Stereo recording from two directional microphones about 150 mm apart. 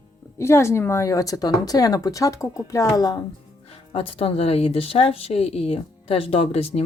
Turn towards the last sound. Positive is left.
turn(degrees=40)  # may be behind; listen again after turning